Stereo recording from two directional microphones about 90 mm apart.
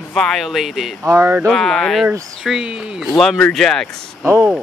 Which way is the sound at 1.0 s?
30° right (ahead or behind).